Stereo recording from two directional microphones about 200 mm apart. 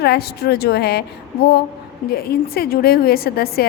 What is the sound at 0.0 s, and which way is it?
A woman's voice, 55° left (ahead or behind).